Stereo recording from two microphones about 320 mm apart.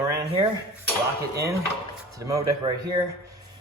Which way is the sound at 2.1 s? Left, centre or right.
Centre.